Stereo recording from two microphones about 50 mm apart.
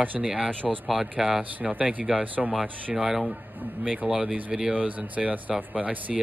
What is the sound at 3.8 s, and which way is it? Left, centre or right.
Speech, right.